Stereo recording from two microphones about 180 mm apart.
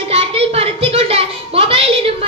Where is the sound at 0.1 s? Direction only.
35° right (ahead or behind).